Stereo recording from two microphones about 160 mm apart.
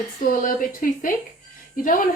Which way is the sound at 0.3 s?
55° left (ahead or behind).